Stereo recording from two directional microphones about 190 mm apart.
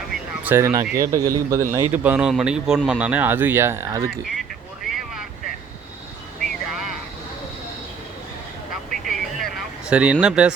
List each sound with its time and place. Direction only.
0.4 s speech: 15° right (ahead or behind)
6.4 s vehicle: centre (ahead or behind)
9.0 s a sound: centre (ahead or behind)